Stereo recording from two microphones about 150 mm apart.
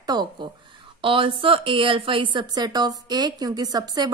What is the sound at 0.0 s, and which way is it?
Speech, 30° right (ahead or behind).